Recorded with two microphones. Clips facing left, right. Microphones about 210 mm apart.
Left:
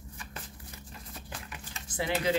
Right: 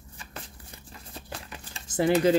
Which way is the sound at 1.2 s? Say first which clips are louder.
Right 3 dB; 35° right (ahead or behind).